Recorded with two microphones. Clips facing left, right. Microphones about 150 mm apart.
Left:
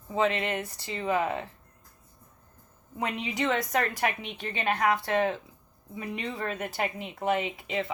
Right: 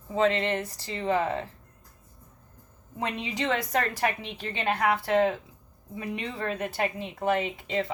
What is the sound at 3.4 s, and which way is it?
Speech, 30° right (ahead or behind).